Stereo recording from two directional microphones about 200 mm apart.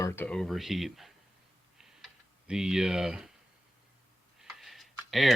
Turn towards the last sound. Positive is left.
turn(degrees=0)  # may be behind; listen again after turning